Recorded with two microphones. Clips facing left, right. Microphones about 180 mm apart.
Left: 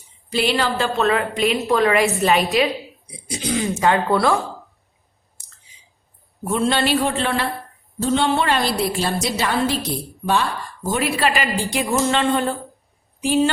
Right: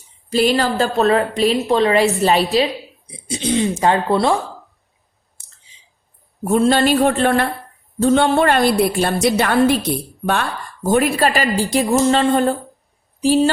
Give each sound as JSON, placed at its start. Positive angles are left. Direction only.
{"t": 0.3, "sound": "a woman's voice", "side_deg": -40}
{"t": 6.5, "sound": "a sound", "side_deg": -40}
{"t": 8.0, "sound": "a woman's voice", "side_deg": -55}
{"t": 10.8, "sound": "a woman's voice", "side_deg": -45}